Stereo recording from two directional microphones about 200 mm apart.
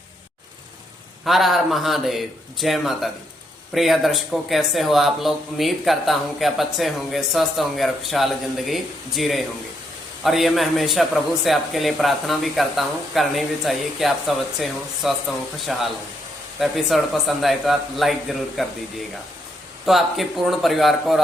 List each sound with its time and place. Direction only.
1.2 s speech: centre (ahead or behind)
19.8 s speech: centre (ahead or behind)